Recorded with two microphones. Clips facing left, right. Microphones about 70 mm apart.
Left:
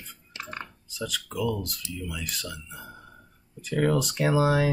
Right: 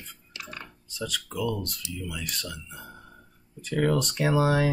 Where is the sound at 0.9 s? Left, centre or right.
Centre.